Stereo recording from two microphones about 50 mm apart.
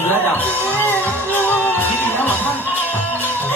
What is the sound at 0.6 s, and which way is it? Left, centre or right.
Music, left.